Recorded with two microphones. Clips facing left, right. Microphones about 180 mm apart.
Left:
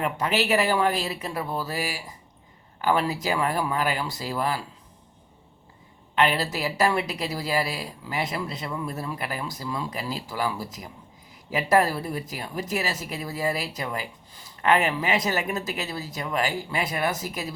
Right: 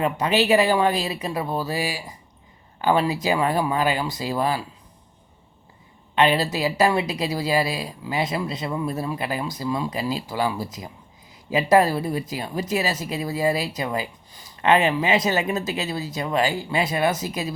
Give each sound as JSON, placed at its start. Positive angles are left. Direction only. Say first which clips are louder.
{"t": 0.0, "sound": "speech", "louder": "right 4 dB", "side_deg": -20}
{"t": 6.1, "sound": "speech", "louder": "right 4 dB", "side_deg": -20}